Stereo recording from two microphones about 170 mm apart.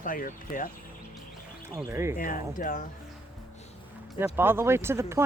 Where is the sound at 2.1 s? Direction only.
50° left (ahead or behind).